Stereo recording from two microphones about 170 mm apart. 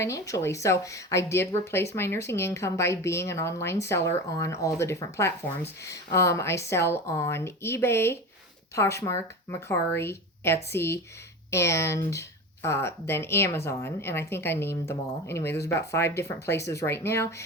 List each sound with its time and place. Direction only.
0.0 s speech: 20° left (ahead or behind)